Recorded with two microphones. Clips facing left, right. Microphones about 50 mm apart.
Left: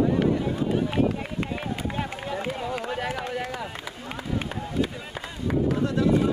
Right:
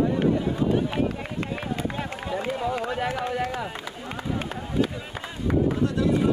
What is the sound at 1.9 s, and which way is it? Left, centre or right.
Speech, centre.